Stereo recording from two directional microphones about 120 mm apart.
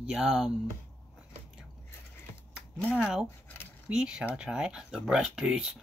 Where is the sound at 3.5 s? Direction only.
20° left (ahead or behind).